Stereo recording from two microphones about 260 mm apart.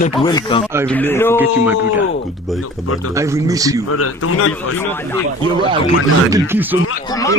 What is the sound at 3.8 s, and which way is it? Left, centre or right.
Speech, left.